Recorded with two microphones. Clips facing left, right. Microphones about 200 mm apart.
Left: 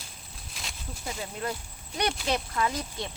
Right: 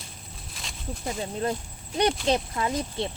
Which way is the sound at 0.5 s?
Centre (ahead or behind).